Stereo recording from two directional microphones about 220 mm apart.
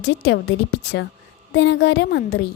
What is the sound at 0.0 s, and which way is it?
Speech, 50° left (ahead or behind).